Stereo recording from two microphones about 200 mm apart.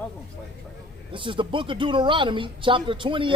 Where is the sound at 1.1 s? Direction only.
25° right (ahead or behind).